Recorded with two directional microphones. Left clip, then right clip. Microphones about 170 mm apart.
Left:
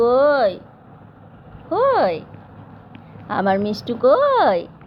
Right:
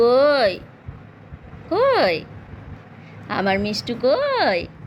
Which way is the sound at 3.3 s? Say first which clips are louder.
Left 2 dB; 5° right (ahead or behind).